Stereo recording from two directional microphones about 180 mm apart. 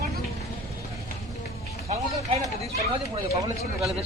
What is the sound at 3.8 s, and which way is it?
Speech, centre (ahead or behind).